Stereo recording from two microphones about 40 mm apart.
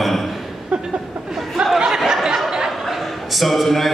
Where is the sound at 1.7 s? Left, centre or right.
Centre.